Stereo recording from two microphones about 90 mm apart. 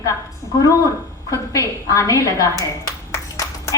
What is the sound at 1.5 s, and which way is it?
A woman's voice, 35° left (ahead or behind).